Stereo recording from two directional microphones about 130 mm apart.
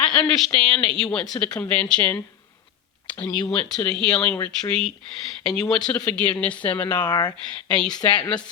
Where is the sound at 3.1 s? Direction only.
10° left (ahead or behind).